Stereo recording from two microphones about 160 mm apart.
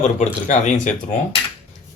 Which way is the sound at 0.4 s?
45° left (ahead or behind).